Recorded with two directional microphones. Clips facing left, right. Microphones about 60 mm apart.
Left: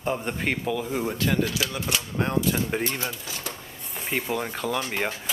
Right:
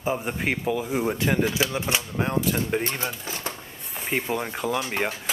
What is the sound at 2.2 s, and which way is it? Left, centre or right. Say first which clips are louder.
Speech: left 1 dB; centre.